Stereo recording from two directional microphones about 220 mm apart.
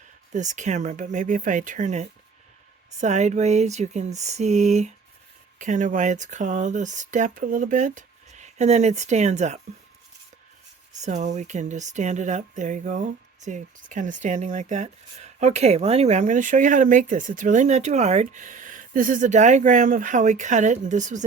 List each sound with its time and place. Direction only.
0.3 s speech: 35° right (ahead or behind)
10.9 s speech: 35° right (ahead or behind)